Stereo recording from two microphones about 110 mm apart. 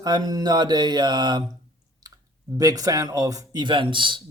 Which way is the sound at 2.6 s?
35° right (ahead or behind).